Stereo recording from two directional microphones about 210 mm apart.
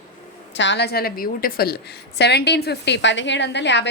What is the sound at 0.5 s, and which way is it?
A woman's voice, 55° left (ahead or behind).